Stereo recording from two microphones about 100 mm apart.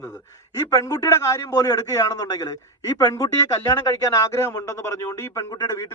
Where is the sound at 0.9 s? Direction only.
35° left (ahead or behind).